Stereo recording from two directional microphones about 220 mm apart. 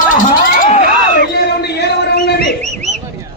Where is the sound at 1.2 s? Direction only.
50° left (ahead or behind).